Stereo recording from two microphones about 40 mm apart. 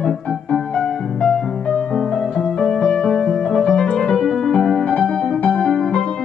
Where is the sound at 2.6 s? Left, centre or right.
Centre.